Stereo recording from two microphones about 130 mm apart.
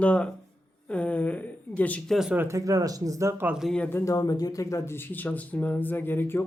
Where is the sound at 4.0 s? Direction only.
25° left (ahead or behind).